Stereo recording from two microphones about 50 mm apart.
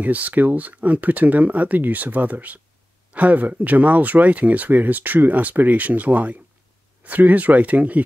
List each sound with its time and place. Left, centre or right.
0.0 s speech: right